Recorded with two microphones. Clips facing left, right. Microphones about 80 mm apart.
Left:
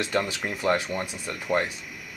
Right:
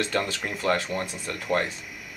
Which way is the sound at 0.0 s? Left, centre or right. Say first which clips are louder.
Even; centre.